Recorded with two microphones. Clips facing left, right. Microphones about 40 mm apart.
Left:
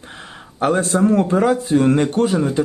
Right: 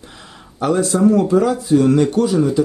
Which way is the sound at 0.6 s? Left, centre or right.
Left.